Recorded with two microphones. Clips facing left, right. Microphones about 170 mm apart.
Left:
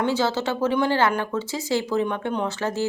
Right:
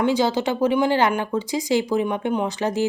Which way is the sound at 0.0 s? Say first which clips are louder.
Right 3 dB; 15° right (ahead or behind).